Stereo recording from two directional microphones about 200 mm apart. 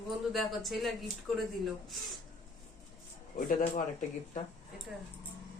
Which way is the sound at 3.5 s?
45° left (ahead or behind).